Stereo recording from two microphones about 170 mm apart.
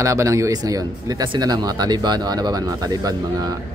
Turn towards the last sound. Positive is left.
turn(degrees=-20)  # may be behind; listen again after turning